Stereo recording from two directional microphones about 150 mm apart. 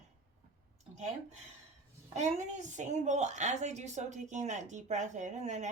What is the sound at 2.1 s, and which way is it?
A woman's voice, 50° right (ahead or behind).